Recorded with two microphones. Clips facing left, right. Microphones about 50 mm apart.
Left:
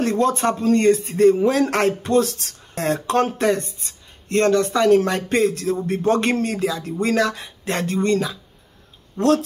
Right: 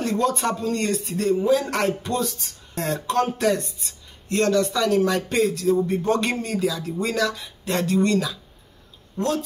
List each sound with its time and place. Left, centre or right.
0.0 s speech: left
1.4 s speech: left
1.7 s speech: left
9.2 s speech: left